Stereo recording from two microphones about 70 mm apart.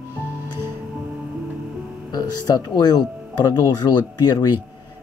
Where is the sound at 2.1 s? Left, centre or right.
Left.